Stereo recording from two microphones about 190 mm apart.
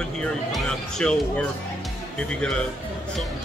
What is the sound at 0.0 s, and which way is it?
Speech, 5° left (ahead or behind).